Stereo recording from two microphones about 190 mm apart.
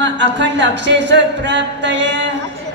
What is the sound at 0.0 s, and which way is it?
Speech, 70° right (ahead or behind).